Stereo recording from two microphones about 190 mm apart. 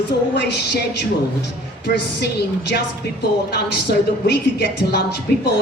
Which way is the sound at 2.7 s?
55° left (ahead or behind).